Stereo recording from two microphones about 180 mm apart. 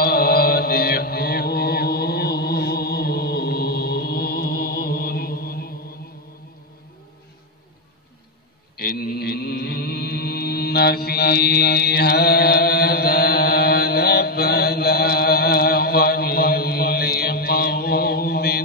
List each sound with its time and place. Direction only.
0.0 s mantra: 60° left (ahead or behind)
8.7 s mantra: 55° left (ahead or behind)